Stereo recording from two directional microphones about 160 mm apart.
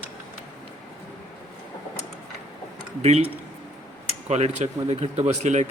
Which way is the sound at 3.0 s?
40° right (ahead or behind).